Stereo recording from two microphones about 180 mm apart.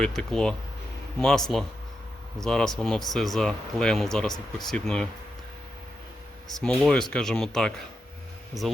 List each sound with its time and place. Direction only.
0.0 s speech: 5° left (ahead or behind)
6.6 s speech: 5° left (ahead or behind)